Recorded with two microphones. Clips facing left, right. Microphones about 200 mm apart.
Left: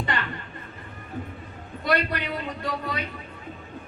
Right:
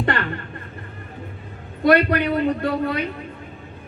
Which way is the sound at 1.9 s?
55° right (ahead or behind).